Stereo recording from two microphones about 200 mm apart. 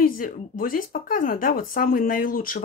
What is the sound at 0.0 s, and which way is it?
Speech, 45° left (ahead or behind).